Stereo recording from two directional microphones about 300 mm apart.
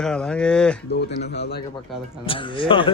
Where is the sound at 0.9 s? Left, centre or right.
Left.